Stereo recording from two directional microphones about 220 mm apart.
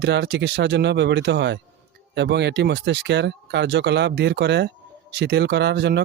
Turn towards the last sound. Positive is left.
turn(degrees=-50)  # may be behind; listen again after turning